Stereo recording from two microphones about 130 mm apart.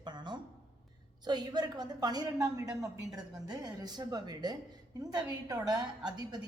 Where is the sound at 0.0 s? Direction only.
35° right (ahead or behind).